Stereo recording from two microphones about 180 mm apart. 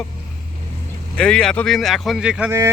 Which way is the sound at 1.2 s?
5° left (ahead or behind).